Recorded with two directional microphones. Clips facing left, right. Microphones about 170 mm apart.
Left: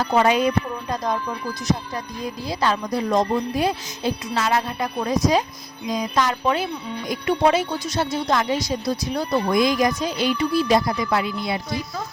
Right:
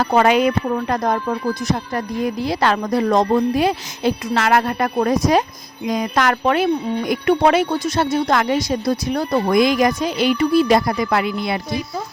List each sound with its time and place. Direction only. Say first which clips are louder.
0.0 s speech: right 3 dB; 65° right (ahead or behind)